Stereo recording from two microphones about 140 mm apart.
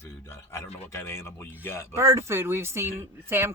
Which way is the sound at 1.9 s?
20° right (ahead or behind).